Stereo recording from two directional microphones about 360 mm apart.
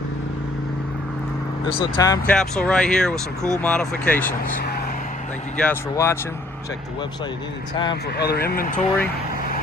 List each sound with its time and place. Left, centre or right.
1.6 s speech: centre
5.5 s speech: centre
8.1 s speech: left